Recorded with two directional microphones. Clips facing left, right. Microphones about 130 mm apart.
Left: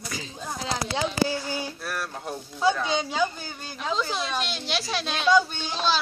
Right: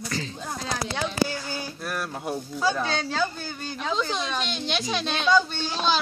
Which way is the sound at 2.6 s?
15° left (ahead or behind).